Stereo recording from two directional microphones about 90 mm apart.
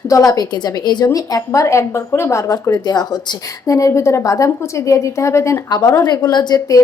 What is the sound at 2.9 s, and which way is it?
A woman's voice, 50° left (ahead or behind).